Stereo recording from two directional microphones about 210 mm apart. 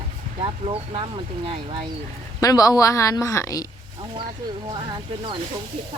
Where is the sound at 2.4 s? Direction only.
15° left (ahead or behind).